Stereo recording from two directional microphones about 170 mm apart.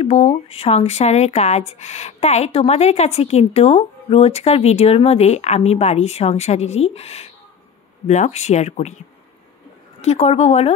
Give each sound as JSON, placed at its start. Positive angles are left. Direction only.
{"t": 0.0, "sound": "speech", "side_deg": 40}
{"t": 10.0, "sound": "speech", "side_deg": 40}